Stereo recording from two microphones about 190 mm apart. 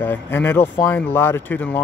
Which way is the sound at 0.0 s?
10° left (ahead or behind).